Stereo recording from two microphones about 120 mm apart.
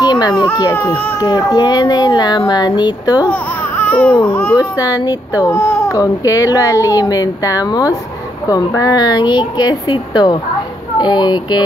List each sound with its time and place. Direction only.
0.0 s baby cry: 35° left (ahead or behind)
0.7 s a child's voice: 20° left (ahead or behind)
1.2 s speech: 35° left (ahead or behind)
3.3 s speech: 15° left (ahead or behind)
4.6 s a child's voice: 30° left (ahead or behind)